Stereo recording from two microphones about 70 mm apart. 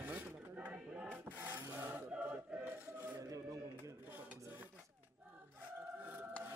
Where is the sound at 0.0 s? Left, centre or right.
Right.